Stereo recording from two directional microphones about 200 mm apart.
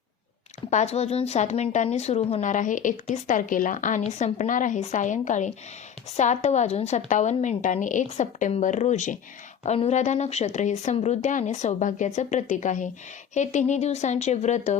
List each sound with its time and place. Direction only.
0.7 s a woman's voice: 35° left (ahead or behind)